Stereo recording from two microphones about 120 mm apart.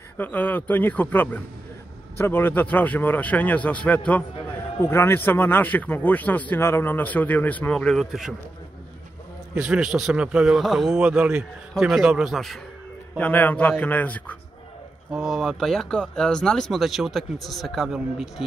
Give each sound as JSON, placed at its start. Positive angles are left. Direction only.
{"t": 0.2, "sound": "speech", "side_deg": 15}
{"t": 9.6, "sound": "a man's voice", "side_deg": -5}
{"t": 13.2, "sound": "speech", "side_deg": 15}
{"t": 15.0, "sound": "speech", "side_deg": -5}